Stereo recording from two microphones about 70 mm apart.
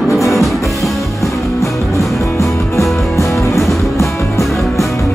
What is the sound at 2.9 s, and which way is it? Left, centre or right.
Music, centre.